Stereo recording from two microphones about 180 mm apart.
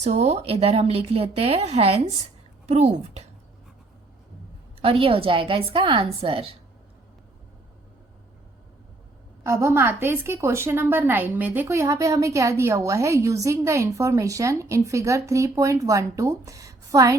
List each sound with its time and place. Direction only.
0.0 s speech: 40° right (ahead or behind)
4.8 s a woman's voice: 30° right (ahead or behind)
9.4 s a woman's voice: 15° right (ahead or behind)